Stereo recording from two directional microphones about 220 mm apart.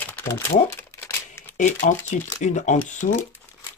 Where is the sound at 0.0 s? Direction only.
10° left (ahead or behind).